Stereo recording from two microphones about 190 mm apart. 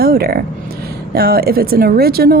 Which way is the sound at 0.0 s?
55° right (ahead or behind).